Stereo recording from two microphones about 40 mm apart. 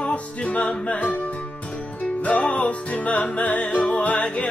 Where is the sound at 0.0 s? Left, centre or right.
Left.